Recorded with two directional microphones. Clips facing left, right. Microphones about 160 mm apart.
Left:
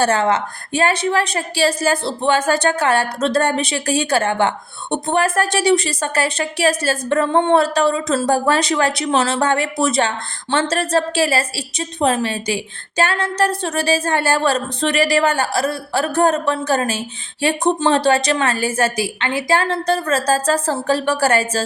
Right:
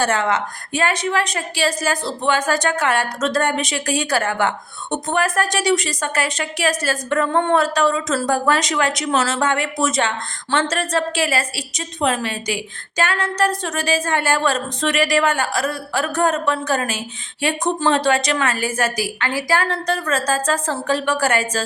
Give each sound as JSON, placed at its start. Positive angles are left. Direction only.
{"t": 0.0, "sound": "a woman's voice", "side_deg": 30}